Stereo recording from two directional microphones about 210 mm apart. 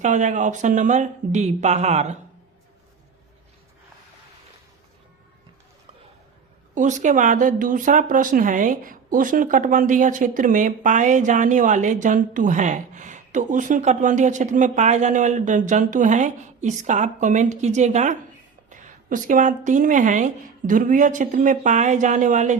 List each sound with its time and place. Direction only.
0.0 s speech: 35° right (ahead or behind)
6.7 s speech: 35° right (ahead or behind)